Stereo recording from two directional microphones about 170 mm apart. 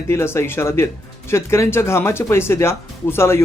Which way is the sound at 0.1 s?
15° left (ahead or behind).